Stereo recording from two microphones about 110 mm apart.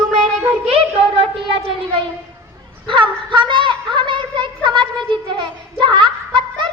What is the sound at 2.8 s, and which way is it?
Speech, 50° right (ahead or behind).